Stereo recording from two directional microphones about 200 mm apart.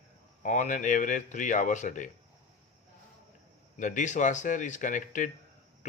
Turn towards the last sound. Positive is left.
turn(degrees=40)  # may be behind; listen again after turning